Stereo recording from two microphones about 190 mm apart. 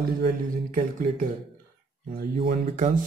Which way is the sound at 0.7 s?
45° right (ahead or behind).